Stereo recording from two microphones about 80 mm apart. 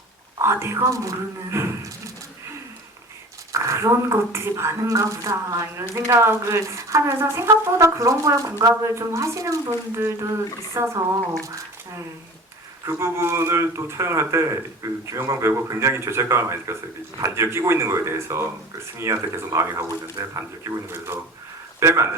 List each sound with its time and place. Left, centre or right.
0.4 s a woman's voice: right
3.5 s a woman's voice: right
10.8 s a woman's voice: right
12.8 s a woman's voice: right
21.8 s speech: right